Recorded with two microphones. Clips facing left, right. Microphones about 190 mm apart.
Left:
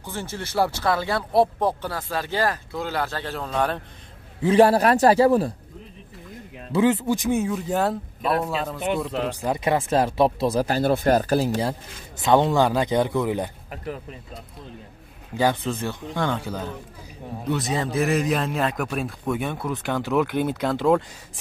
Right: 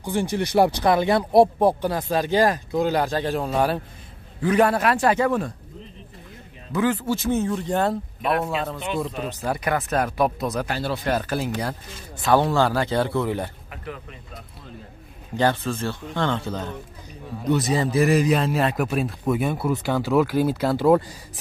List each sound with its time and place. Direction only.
0.0 s speech: 15° right (ahead or behind)
4.4 s a man's voice: 30° left (ahead or behind)
6.7 s speech: 20° left (ahead or behind); by 8.8 s centre (ahead or behind)
9.3 s speech: 15° left (ahead or behind); by 10.8 s 35° left (ahead or behind)
10.8 s a man's voice: 45° left (ahead or behind)
12.2 s speech: 20° left (ahead or behind)
15.3 s speech: 15° left (ahead or behind)
17.5 s speech: centre (ahead or behind)